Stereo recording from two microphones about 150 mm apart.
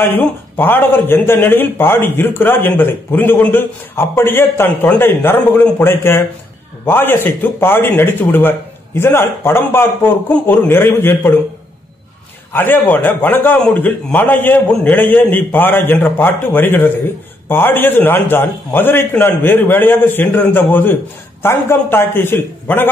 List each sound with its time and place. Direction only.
0.0 s speech: 15° left (ahead or behind)
12.5 s speech: 15° left (ahead or behind)